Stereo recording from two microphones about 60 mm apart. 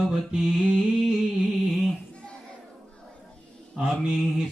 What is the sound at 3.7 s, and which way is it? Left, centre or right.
Mantra, centre.